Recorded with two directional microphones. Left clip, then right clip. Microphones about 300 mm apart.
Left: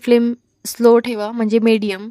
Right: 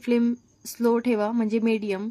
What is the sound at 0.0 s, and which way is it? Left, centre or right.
A woman's voice, left.